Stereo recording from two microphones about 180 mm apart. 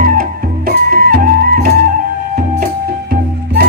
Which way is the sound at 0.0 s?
50° right (ahead or behind).